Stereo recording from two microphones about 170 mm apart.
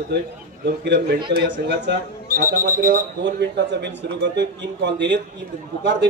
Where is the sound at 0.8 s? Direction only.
90° right.